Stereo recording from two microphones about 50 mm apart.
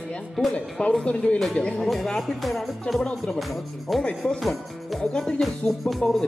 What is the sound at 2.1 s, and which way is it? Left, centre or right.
Music, centre.